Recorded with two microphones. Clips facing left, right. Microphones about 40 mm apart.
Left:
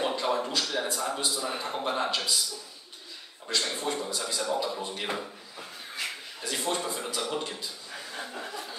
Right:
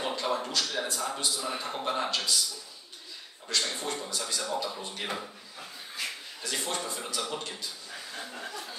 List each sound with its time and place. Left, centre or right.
0.0 s a sound: centre
1.6 s a man's voice: centre
2.0 s speech: left
3.4 s speech: centre
6.5 s a man's voice: centre